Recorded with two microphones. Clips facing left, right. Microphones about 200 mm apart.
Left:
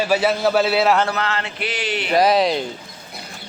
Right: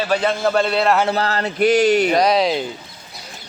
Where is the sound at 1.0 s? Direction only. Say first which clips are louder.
Right 3 dB; 35° right (ahead or behind).